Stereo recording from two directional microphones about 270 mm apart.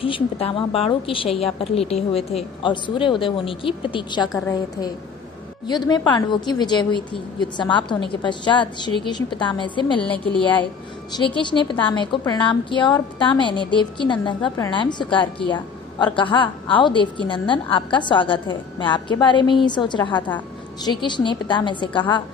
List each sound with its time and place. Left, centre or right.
0.0 s a woman's voice: left
11.2 s a woman's voice: centre